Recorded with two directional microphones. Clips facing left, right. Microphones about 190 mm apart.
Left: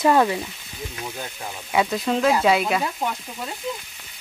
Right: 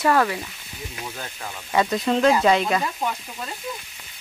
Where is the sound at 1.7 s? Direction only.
Centre (ahead or behind).